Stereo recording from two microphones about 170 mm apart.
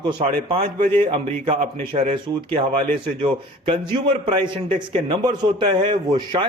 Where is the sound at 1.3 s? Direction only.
35° right (ahead or behind).